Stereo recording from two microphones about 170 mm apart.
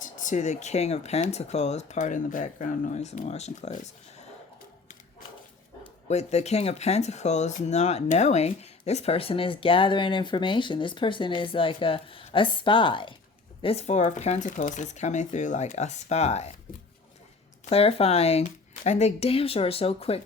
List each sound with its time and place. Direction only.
0.0 s speech: 50° left (ahead or behind)
5.8 s speech: 40° left (ahead or behind)
17.7 s speech: 35° left (ahead or behind)